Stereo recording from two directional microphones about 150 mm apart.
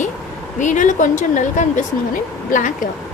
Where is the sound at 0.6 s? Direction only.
55° left (ahead or behind).